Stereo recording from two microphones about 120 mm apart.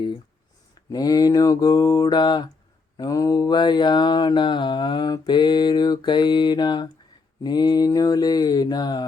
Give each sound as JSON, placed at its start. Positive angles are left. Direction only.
{"t": 0.9, "sound": "mantra", "side_deg": 30}